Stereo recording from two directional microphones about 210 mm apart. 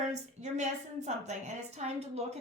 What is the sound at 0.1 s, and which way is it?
A woman's voice, 35° right (ahead or behind).